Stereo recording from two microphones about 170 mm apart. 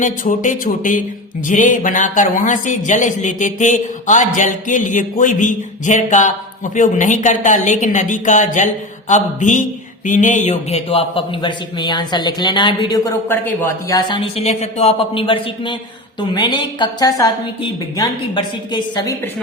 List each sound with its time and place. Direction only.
0.0 s a man's voice: 50° left (ahead or behind); by 13.1 s 25° left (ahead or behind)
13.2 s a man's voice: 10° left (ahead or behind)